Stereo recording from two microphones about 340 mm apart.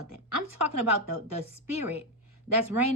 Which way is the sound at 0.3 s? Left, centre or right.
Right.